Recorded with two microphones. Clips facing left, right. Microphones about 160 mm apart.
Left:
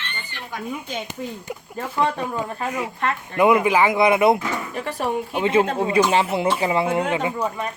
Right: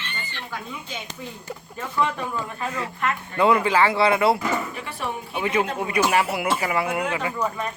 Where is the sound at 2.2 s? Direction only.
15° left (ahead or behind).